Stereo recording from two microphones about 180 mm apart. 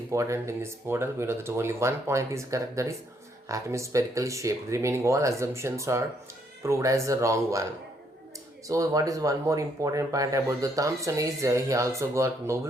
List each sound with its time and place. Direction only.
0.1 s speech: 15° right (ahead or behind)
8.6 s speech: 20° right (ahead or behind)